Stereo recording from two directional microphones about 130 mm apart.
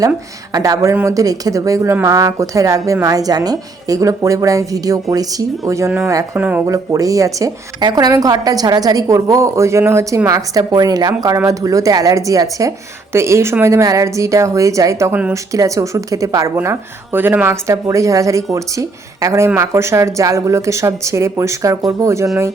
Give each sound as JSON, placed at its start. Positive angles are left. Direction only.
{"t": 0.5, "sound": "speech", "side_deg": -25}
{"t": 16.6, "sound": "speech", "side_deg": -15}